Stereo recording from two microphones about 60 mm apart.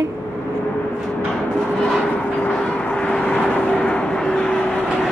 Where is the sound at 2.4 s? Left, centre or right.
Centre.